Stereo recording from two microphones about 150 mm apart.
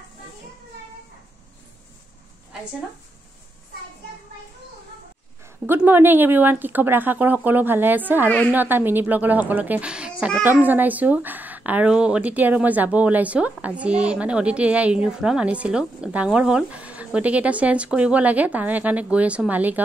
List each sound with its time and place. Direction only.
5.7 s speech: 15° right (ahead or behind)